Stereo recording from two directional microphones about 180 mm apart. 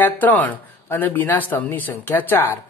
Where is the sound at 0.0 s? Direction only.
10° left (ahead or behind).